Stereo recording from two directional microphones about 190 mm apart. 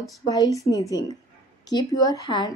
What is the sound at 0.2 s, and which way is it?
A woman's voice, 20° left (ahead or behind).